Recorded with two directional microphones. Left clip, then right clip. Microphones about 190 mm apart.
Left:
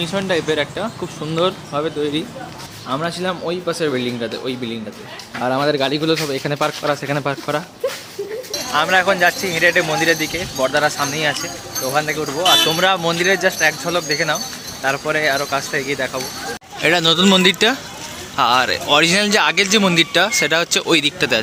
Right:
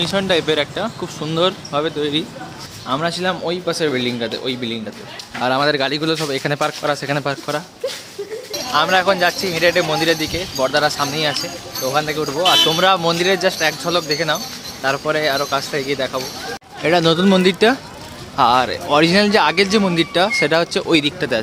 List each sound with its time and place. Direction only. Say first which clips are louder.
0.0 s speech: right 2 dB; 5° right (ahead or behind)
5.4 s speech: right 1 dB; 20° right (ahead or behind); by 7.6 s 5° right (ahead or behind)
8.7 s speech: even; 15° right (ahead or behind)
16.8 s speech: left 1 dB; centre (ahead or behind)